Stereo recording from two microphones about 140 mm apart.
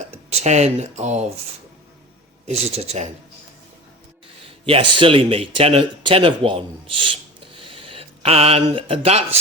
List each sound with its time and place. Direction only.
0.3 s speech: 50° right (ahead or behind)
2.6 s speech: 50° right (ahead or behind)
4.4 s speech: 40° right (ahead or behind)